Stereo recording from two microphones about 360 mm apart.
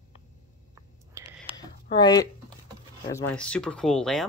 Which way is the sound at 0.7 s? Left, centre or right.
Centre.